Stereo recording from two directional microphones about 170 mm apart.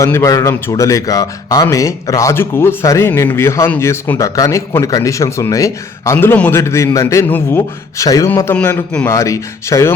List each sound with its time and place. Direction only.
0.0 s a man's voice: 15° left (ahead or behind)